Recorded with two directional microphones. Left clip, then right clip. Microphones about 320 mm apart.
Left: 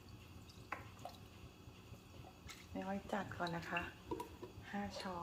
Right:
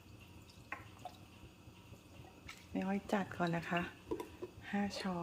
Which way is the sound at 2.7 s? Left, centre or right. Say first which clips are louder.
Right 5 dB; right.